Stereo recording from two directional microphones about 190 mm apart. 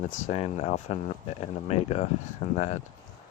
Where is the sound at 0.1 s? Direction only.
35° left (ahead or behind).